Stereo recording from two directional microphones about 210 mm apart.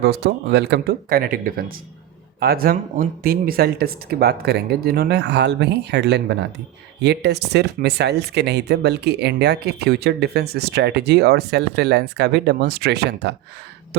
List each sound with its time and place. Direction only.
0.0 s speech: 50° right (ahead or behind)